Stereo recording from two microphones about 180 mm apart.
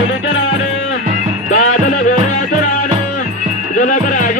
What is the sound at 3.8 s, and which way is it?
Music, 45° left (ahead or behind).